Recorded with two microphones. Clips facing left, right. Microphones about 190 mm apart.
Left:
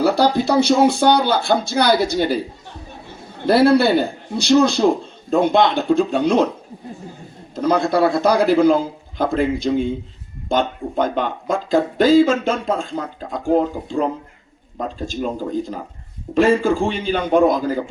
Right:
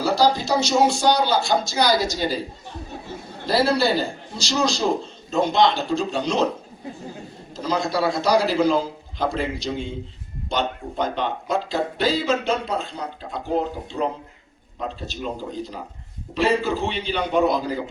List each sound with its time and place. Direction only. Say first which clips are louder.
0.0 s speech: left 4 dB; 60° left (ahead or behind)
3.4 s speech: left 7 dB; 55° left (ahead or behind)
7.5 s speech: left 6 dB; 55° left (ahead or behind)